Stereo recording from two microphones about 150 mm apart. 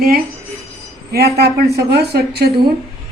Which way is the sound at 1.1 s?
90° right.